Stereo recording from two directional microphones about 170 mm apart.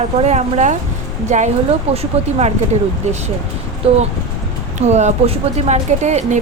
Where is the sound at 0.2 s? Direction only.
40° right (ahead or behind).